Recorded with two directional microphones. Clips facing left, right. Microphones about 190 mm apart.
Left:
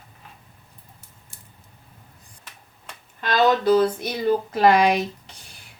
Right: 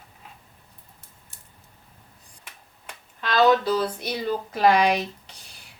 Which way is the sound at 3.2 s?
50° left (ahead or behind).